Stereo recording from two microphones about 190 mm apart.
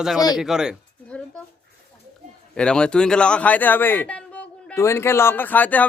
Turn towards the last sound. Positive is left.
turn(degrees=10)  # may be behind; listen again after turning